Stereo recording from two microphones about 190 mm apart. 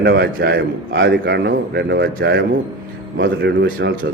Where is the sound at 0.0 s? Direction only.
50° right (ahead or behind).